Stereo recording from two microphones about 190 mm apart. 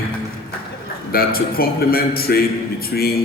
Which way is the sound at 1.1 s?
50° left (ahead or behind).